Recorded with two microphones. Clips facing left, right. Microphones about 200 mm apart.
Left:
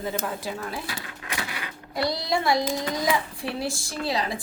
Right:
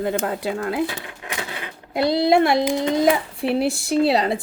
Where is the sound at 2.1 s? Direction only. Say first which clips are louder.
Right 9 dB; 60° right (ahead or behind).